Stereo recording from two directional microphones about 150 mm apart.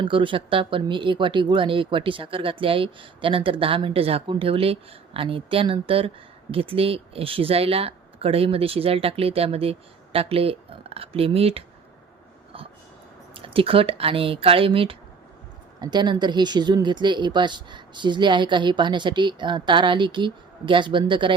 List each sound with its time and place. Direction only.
0.0 s speech: 35° right (ahead or behind)
13.3 s speech: 35° right (ahead or behind)